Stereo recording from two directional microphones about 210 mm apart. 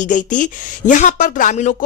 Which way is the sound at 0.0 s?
35° left (ahead or behind).